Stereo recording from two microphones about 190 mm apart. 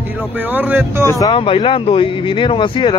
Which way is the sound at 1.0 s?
20° left (ahead or behind).